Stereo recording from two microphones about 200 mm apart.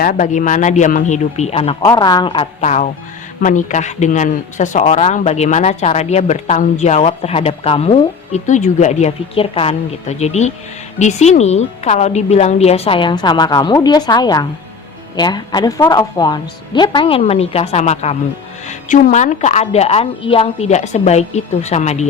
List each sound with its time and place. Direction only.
0.0 s a woman's voice: 40° left (ahead or behind); by 2.5 s 25° left (ahead or behind)
2.6 s a woman's voice: 35° left (ahead or behind)